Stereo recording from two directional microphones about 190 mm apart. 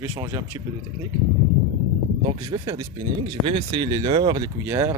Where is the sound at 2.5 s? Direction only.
20° right (ahead or behind).